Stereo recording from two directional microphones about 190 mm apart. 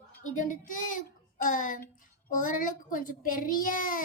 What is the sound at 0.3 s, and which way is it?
A child's voice, 45° left (ahead or behind).